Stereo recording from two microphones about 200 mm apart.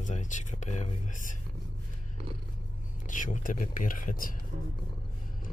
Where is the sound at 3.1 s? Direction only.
40° left (ahead or behind).